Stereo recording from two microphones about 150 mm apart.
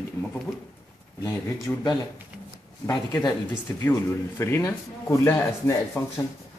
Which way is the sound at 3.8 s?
15° left (ahead or behind).